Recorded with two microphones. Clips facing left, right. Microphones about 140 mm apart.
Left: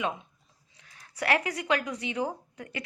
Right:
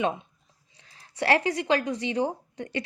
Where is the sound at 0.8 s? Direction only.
30° right (ahead or behind).